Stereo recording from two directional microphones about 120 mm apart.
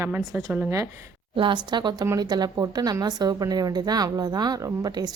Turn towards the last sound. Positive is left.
turn(degrees=-35)  # may be behind; listen again after turning